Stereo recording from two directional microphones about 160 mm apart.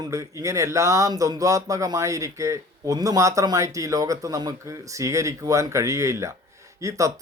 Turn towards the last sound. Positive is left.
turn(degrees=-20)  # may be behind; listen again after turning